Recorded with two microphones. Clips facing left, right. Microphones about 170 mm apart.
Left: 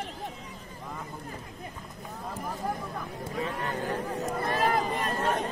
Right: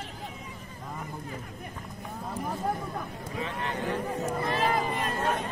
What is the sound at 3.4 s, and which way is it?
Vehicle, 40° left (ahead or behind).